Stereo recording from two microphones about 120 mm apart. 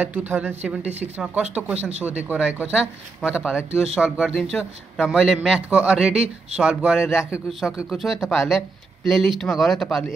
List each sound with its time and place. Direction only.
0.0 s speech: 15° right (ahead or behind)
1.8 s speech: 60° right (ahead or behind)
2.0 s speech: 10° right (ahead or behind); by 10.1 s 5° left (ahead or behind)